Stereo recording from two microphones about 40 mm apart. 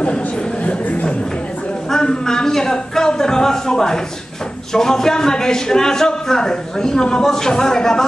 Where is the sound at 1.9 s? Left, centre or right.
Centre.